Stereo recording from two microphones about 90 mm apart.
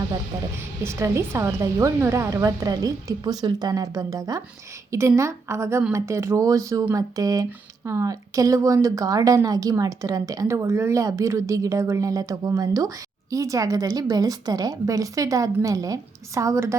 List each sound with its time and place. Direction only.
0.8 s a woman's voice: 30° right (ahead or behind)